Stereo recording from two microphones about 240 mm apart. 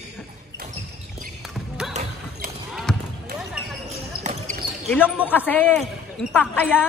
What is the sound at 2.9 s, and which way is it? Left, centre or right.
Basketball bounce, centre.